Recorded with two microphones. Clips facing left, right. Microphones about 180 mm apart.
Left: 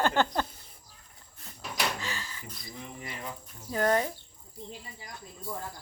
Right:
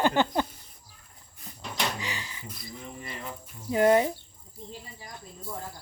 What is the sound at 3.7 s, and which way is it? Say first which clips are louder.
Speech: right 5 dB; 15° right (ahead or behind).